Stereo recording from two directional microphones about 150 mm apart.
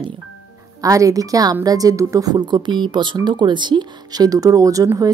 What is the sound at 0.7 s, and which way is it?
A woman's voice, 25° right (ahead or behind).